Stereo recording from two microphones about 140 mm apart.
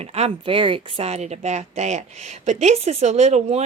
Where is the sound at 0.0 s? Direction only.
50° right (ahead or behind).